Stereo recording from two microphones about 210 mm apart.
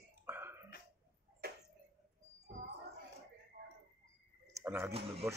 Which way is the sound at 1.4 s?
50° right (ahead or behind).